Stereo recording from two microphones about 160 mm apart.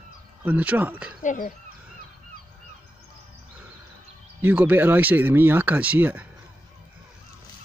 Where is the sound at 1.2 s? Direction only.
55° left (ahead or behind).